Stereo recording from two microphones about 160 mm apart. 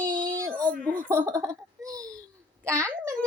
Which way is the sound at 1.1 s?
15° right (ahead or behind).